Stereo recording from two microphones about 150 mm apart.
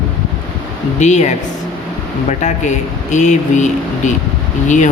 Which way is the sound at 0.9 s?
50° left (ahead or behind).